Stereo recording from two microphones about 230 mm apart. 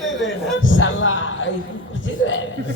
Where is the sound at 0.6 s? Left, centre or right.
Left.